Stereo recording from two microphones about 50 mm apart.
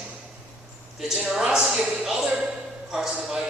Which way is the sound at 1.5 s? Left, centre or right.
Centre.